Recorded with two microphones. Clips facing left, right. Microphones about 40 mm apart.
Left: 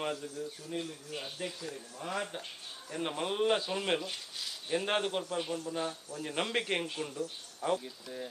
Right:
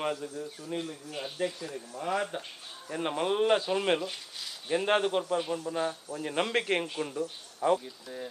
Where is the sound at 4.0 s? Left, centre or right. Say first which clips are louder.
Right 3 dB; centre.